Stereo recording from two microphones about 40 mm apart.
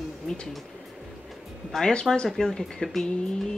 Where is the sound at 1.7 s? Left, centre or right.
Centre.